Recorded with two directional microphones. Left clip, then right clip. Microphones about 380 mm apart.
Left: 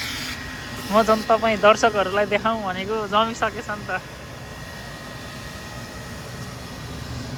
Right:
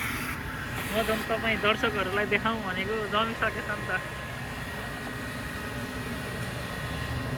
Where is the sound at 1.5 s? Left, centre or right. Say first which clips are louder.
Left 9 dB; centre.